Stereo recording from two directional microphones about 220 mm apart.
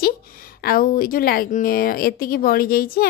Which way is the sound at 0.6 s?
45° left (ahead or behind).